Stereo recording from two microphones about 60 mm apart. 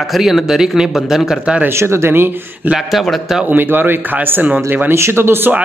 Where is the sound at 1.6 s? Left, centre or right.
Right.